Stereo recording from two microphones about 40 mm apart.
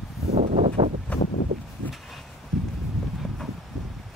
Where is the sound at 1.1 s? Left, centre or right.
Left.